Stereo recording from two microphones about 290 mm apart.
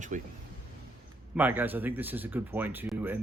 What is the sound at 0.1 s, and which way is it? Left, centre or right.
Speech, right.